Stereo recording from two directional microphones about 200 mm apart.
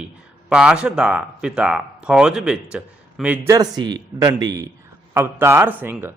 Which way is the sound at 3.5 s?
20° right (ahead or behind).